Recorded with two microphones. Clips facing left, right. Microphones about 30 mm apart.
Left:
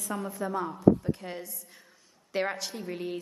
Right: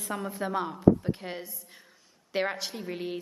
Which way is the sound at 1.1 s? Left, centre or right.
Right.